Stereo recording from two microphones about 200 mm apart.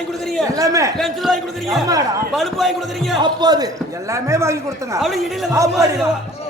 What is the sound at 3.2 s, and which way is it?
A man's voice, 20° right (ahead or behind).